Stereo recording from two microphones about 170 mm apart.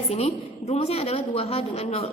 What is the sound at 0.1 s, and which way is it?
A woman's voice, 35° left (ahead or behind).